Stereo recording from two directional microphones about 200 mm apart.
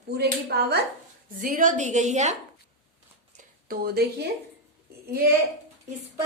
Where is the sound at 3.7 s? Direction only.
50° right (ahead or behind).